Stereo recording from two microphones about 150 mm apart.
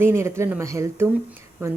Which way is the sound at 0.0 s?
15° right (ahead or behind).